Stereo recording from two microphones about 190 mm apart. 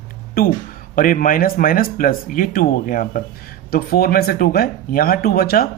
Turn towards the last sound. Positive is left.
turn(degrees=50)  # may be behind; listen again after turning